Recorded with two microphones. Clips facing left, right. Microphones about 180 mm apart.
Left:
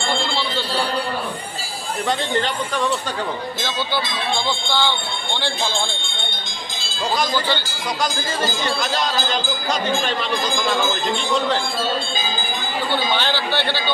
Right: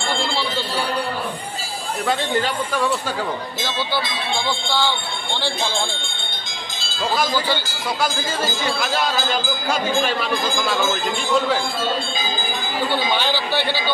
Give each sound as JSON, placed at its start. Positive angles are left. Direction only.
{"t": 2.0, "sound": "speech", "side_deg": -5}
{"t": 4.5, "sound": "speech", "side_deg": -5}
{"t": 7.2, "sound": "speech", "side_deg": -5}
{"t": 12.9, "sound": "speech", "side_deg": -10}